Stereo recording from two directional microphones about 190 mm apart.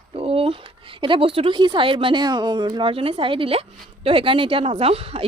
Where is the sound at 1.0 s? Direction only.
25° right (ahead or behind).